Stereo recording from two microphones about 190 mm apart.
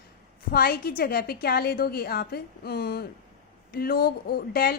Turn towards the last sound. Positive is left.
turn(degrees=50)  # may be behind; listen again after turning